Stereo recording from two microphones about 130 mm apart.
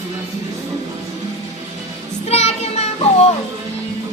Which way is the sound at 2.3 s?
55° left (ahead or behind).